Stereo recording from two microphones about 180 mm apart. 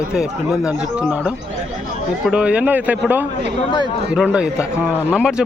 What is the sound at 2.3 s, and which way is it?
A man's voice, 5° right (ahead or behind).